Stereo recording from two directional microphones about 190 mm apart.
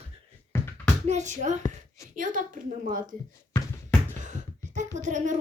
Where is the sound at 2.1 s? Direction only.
45° right (ahead or behind).